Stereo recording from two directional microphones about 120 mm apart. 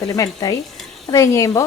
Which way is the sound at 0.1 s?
30° left (ahead or behind).